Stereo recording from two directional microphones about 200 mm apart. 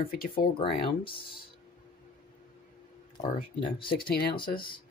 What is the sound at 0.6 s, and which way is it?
Speech, 25° left (ahead or behind).